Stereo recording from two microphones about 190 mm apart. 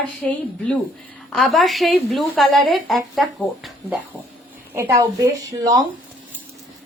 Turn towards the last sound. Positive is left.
turn(degrees=-20)  # may be behind; listen again after turning